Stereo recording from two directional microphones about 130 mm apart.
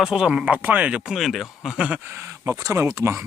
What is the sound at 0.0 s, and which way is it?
Speech, 5° right (ahead or behind).